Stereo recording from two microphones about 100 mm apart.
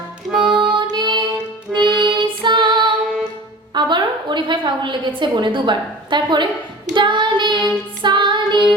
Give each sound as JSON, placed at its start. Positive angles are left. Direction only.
{"t": 0.3, "sound": "music", "side_deg": -5}
{"t": 0.6, "sound": "music", "side_deg": -55}
{"t": 2.9, "sound": "music", "side_deg": -5}
{"t": 3.8, "sound": "a sound", "side_deg": -50}
{"t": 6.9, "sound": "child singing", "side_deg": -50}